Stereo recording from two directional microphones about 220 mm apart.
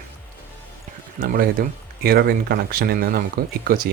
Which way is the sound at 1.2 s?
40° right (ahead or behind).